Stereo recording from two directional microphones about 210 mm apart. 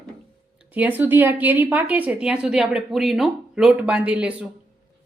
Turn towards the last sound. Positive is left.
turn(degrees=-5)  # may be behind; listen again after turning